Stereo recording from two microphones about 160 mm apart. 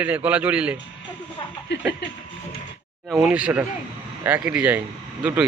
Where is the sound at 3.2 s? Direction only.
10° right (ahead or behind).